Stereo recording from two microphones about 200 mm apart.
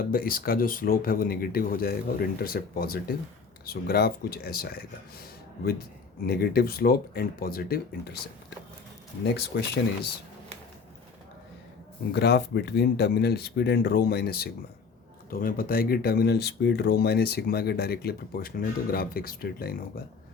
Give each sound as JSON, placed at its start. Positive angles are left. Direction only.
{"t": 0.0, "sound": "speech", "side_deg": 45}
{"t": 6.2, "sound": "speech", "side_deg": 50}
{"t": 9.2, "sound": "speech", "side_deg": 55}
{"t": 12.1, "sound": "speech", "side_deg": 55}